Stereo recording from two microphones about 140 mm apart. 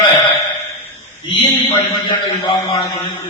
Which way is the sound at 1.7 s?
35° left (ahead or behind).